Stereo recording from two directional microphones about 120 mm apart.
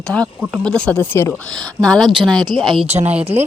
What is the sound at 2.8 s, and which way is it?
Speech, 60° right (ahead or behind).